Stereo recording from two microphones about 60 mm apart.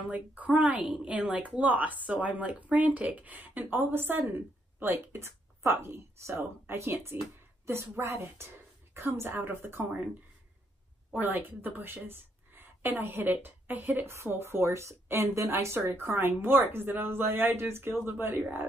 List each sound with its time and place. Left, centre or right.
0.1 s a woman's voice: right
0.8 s a woman's voice: centre
1.5 s a woman's voice: right
11.1 s a woman's voice: right
14.1 s speech: right